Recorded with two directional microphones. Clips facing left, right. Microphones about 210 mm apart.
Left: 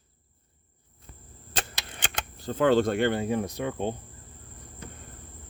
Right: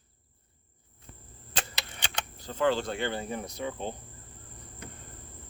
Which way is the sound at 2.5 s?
55° left (ahead or behind).